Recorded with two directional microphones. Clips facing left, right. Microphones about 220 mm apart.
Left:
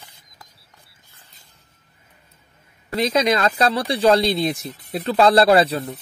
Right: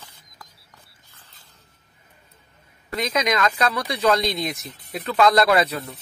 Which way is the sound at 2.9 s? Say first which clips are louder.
Left 4 dB; 30° left (ahead or behind).